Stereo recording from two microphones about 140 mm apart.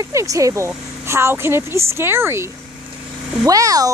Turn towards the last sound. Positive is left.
turn(degrees=-25)  # may be behind; listen again after turning